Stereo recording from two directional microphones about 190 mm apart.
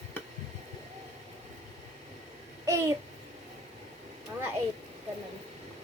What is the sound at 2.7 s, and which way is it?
Babbling, 15° right (ahead or behind).